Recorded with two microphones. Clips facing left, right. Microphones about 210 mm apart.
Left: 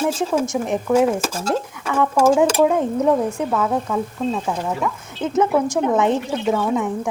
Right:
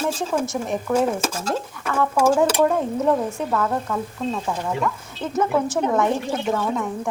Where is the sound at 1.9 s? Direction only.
15° left (ahead or behind).